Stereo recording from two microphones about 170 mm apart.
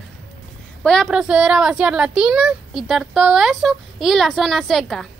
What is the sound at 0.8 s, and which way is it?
A woman's voice, centre (ahead or behind).